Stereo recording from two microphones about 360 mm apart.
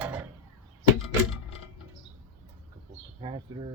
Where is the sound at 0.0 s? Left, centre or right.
Centre.